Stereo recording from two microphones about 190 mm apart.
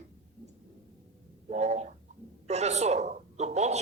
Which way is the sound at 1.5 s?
35° right (ahead or behind).